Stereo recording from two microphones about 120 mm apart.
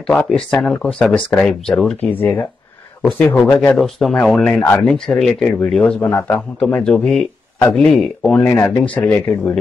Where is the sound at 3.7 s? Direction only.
Centre (ahead or behind).